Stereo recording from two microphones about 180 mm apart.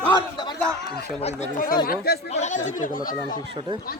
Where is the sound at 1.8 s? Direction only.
55° left (ahead or behind).